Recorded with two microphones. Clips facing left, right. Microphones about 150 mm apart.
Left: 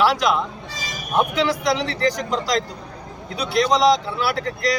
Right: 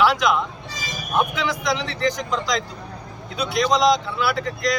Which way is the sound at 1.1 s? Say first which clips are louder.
Left 3 dB; 35° left (ahead or behind).